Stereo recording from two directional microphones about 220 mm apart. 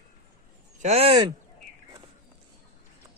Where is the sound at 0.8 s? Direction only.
30° right (ahead or behind).